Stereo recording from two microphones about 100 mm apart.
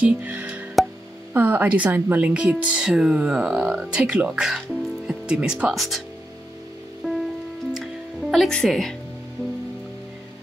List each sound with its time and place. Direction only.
0.0 s music: 15° right (ahead or behind)
1.3 s speech: 20° right (ahead or behind); by 6.0 s centre (ahead or behind)
7.0 s music: centre (ahead or behind)